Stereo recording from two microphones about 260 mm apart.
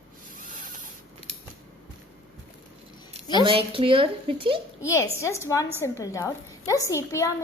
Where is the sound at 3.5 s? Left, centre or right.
Right.